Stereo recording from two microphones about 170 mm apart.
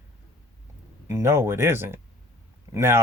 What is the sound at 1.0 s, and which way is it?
Speech, 15° right (ahead or behind).